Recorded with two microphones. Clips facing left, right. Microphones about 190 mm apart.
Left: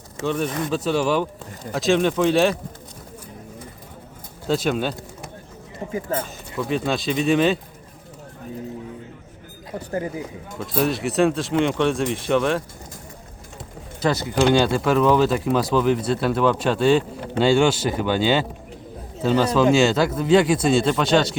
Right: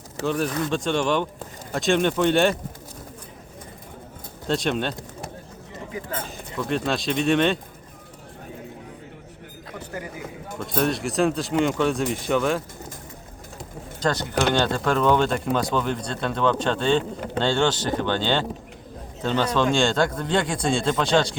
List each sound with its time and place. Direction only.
0.3 s speech: centre (ahead or behind)
4.4 s speech: 5° left (ahead or behind)
5.8 s a man's voice: 35° left (ahead or behind)
6.6 s speech: centre (ahead or behind)
9.7 s a man's voice: 35° left (ahead or behind)
10.6 s speech: centre (ahead or behind)
14.0 s speech: 10° left (ahead or behind)